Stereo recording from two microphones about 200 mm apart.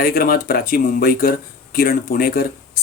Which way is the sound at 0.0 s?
50° left (ahead or behind).